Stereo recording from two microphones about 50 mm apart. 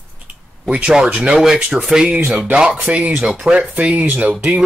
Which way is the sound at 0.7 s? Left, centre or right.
Centre.